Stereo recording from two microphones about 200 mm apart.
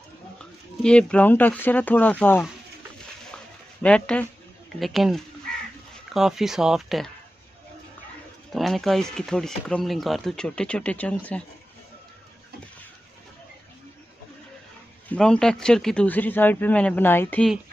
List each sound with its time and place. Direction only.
0.8 s speech: 5° left (ahead or behind)
3.8 s speech: 5° left (ahead or behind)
8.5 s speech: centre (ahead or behind)
15.0 s speech: 5° left (ahead or behind)